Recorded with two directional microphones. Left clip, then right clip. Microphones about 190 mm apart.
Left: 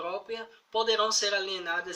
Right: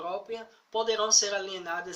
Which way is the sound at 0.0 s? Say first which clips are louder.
Even; 5° right (ahead or behind).